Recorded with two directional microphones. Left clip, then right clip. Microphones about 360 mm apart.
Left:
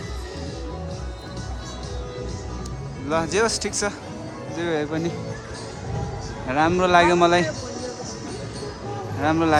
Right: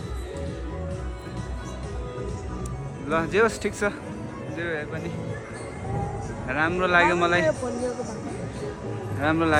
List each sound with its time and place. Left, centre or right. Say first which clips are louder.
3.1 s speech: left 1 dB; centre
6.5 s speech: left 4 dB; centre
9.2 s speech: left 2 dB; centre